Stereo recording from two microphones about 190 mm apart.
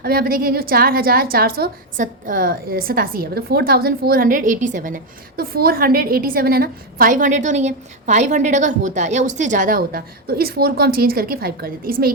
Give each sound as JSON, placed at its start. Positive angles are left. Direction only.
{"t": 0.0, "sound": "a woman's voice", "side_deg": -55}